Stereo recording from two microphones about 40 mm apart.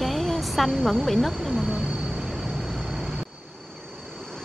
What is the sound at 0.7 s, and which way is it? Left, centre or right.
Speech, centre.